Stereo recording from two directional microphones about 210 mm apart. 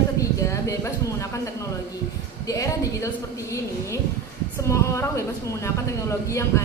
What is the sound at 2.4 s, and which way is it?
A woman's voice, 15° left (ahead or behind).